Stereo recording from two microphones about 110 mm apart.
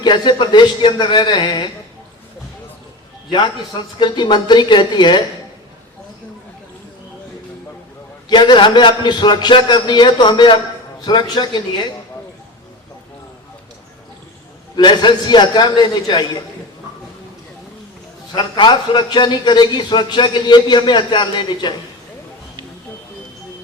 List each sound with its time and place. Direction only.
0.0 s a man's voice: 45° left (ahead or behind)
3.3 s a man's voice: 45° left (ahead or behind)
8.3 s a man's voice: 45° left (ahead or behind)
14.8 s a man's voice: 45° left (ahead or behind)
18.3 s a man's voice: 45° left (ahead or behind)